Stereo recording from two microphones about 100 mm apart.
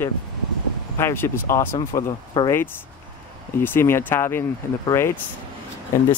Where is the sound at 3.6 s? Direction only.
20° left (ahead or behind).